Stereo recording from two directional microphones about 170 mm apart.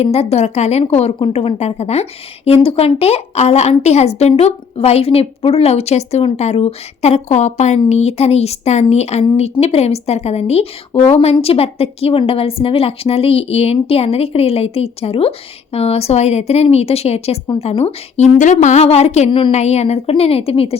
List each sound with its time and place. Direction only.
0.0 s a woman's voice: 35° left (ahead or behind)